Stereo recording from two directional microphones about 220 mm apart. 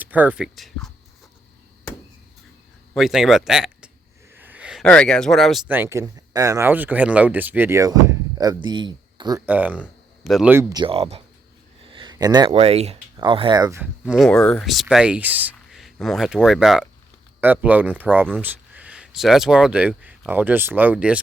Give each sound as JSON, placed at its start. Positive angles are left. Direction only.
{"t": 0.0, "sound": "speech", "side_deg": -5}
{"t": 2.9, "sound": "speech", "side_deg": 0}
{"t": 9.5, "sound": "speech", "side_deg": -5}